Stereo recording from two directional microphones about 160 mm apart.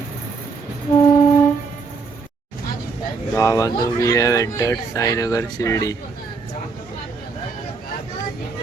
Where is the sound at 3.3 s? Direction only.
20° left (ahead or behind).